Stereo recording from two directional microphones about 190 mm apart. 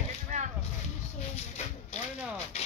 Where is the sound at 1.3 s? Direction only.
35° left (ahead or behind).